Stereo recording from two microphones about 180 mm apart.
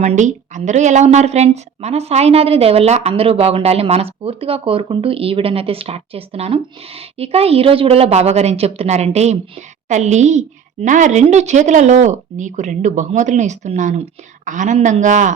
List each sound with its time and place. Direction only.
0.0 s a woman's voice: 40° right (ahead or behind)